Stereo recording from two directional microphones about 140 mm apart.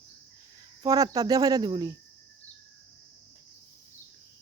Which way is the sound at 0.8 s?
25° right (ahead or behind).